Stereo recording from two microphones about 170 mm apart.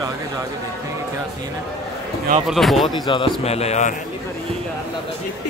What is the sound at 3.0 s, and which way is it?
Speech, 30° left (ahead or behind).